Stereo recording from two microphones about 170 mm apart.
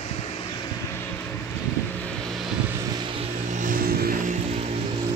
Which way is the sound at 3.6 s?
55° right (ahead or behind).